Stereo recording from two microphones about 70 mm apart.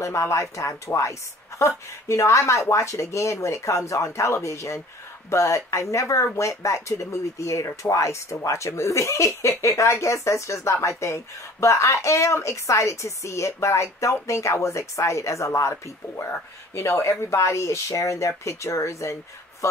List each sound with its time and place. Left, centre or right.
0.0 s speech: left
16.3 s speech: left